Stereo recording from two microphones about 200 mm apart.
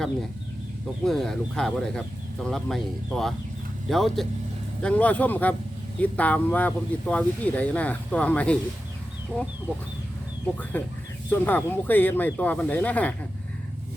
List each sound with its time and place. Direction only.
1.0 s speech: centre (ahead or behind)
10.4 s speech: 10° left (ahead or behind)